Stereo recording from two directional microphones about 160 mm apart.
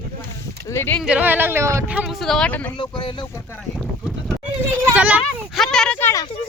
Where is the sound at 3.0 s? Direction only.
30° left (ahead or behind).